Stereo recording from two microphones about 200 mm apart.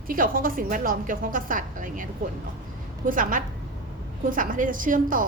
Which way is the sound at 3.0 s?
40° right (ahead or behind).